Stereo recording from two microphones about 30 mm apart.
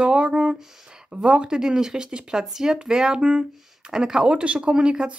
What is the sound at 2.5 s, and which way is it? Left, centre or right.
Speech, centre.